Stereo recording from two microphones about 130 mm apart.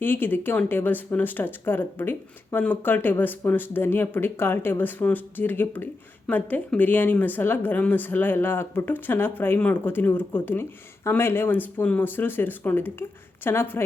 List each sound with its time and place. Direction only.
0.0 s speech: 15° left (ahead or behind)